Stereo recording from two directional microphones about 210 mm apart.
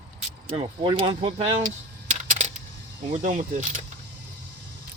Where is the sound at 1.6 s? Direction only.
40° right (ahead or behind).